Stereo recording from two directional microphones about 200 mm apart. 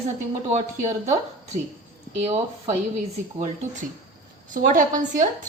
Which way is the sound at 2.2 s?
35° right (ahead or behind).